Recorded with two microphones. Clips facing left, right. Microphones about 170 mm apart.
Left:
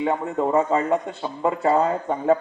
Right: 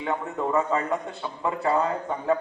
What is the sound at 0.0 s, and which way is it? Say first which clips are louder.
Speech: left 5 dB; 30° left (ahead or behind).